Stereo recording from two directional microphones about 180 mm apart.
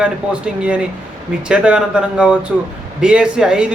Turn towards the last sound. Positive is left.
turn(degrees=-5)  # may be behind; listen again after turning